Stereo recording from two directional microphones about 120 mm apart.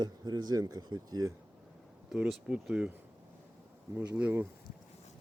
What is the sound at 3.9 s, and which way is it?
Speech, 15° right (ahead or behind).